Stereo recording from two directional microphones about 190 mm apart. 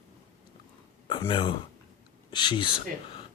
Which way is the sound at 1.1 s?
25° left (ahead or behind).